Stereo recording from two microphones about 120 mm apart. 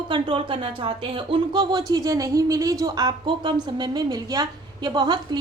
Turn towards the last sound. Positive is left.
turn(degrees=-40)  # may be behind; listen again after turning